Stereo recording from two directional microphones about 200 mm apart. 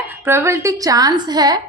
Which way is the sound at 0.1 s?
10° right (ahead or behind).